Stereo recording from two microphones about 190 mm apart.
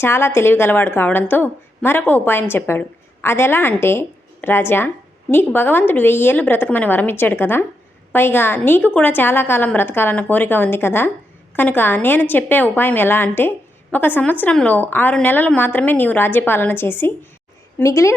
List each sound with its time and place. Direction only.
0.0 s a woman's voice: 15° left (ahead or behind)